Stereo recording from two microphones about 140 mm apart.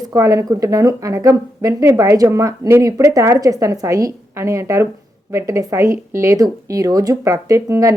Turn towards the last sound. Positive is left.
turn(degrees=-25)  # may be behind; listen again after turning